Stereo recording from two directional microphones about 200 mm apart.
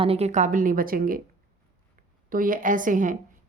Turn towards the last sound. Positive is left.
turn(degrees=-40)  # may be behind; listen again after turning